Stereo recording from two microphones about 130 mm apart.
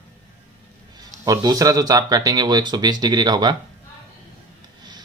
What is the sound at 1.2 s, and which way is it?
Speech, 30° right (ahead or behind).